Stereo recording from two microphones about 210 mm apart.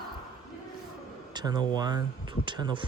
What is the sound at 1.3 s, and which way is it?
Speech, 20° right (ahead or behind).